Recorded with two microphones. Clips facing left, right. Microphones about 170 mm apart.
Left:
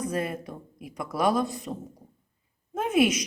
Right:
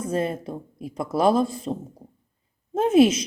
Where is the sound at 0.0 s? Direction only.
25° right (ahead or behind).